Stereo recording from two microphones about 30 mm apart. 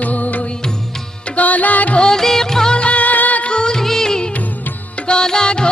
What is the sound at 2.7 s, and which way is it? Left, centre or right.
Music, left.